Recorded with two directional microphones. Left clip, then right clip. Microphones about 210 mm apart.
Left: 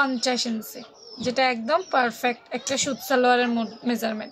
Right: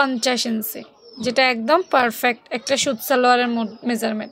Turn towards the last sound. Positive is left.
turn(degrees=-35)  # may be behind; listen again after turning